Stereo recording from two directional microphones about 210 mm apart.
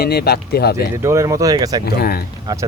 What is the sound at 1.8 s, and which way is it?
Speech, 45° left (ahead or behind).